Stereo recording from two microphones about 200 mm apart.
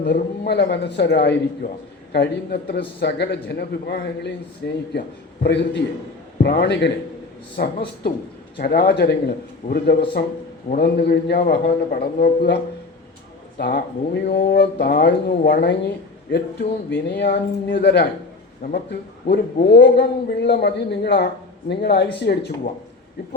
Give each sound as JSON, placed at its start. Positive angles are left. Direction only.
{"t": 0.0, "sound": "a man's voice", "side_deg": 60}
{"t": 13.6, "sound": "a man's voice", "side_deg": 55}